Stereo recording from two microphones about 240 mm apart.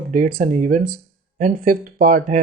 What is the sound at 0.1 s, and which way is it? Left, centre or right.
Speech, right.